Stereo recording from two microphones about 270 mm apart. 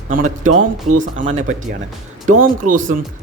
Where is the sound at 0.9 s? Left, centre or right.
Right.